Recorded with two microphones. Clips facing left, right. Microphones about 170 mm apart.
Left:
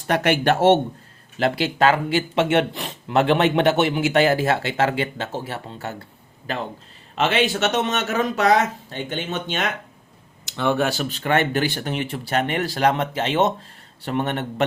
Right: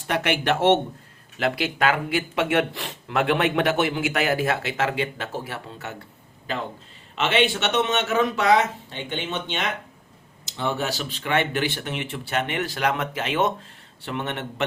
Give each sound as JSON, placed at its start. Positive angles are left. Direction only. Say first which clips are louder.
{"t": 0.1, "sound": "speech", "louder": "left 4 dB", "side_deg": 40}
{"t": 7.2, "sound": "speech", "louder": "left 2 dB", "side_deg": 40}
{"t": 10.4, "sound": "speech", "louder": "left 5 dB", "side_deg": 65}
{"t": 14.0, "sound": "speech", "louder": "left 5 dB", "side_deg": 40}